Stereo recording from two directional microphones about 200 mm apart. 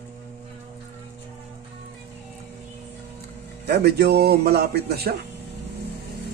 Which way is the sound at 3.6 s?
55° right (ahead or behind).